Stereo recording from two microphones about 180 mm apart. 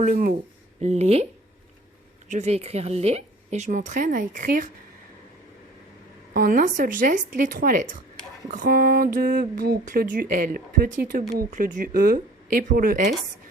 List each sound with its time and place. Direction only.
0.0 s a woman's voice: 45° right (ahead or behind)
2.3 s a woman's voice: 35° right (ahead or behind)
6.3 s speech: 50° right (ahead or behind)